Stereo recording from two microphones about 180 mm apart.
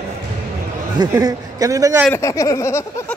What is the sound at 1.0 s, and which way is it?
A man's voice, 20° right (ahead or behind).